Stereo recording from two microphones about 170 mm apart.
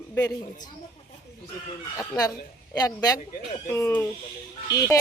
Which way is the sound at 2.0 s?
20° left (ahead or behind).